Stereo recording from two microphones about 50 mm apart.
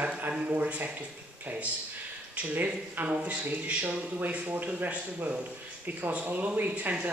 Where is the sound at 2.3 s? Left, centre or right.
Right.